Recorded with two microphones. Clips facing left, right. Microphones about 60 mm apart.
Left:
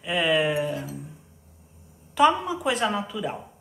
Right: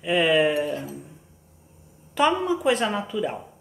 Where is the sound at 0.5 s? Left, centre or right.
Centre.